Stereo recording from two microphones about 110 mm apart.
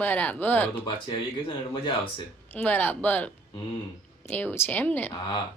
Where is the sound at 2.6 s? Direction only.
15° left (ahead or behind).